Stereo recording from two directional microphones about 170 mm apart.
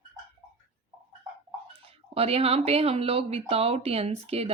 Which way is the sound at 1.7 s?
35° right (ahead or behind).